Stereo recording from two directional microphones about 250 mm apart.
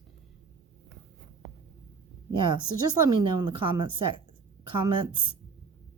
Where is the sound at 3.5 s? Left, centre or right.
Right.